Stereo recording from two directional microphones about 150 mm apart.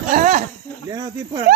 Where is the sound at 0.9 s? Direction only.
25° right (ahead or behind).